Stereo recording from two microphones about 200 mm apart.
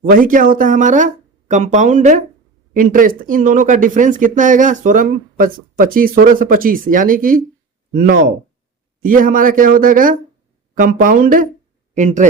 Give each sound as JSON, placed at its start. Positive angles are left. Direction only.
{"t": 0.0, "sound": "speech", "side_deg": -45}